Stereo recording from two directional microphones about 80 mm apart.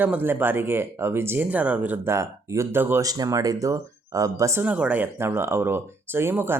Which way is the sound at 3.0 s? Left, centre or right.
Right.